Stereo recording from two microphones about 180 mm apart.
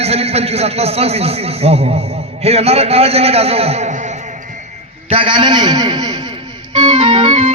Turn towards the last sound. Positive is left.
turn(degrees=-35)  # may be behind; listen again after turning